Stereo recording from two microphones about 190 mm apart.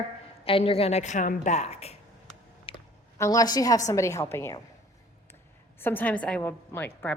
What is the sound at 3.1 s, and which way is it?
A woman's voice, 15° left (ahead or behind).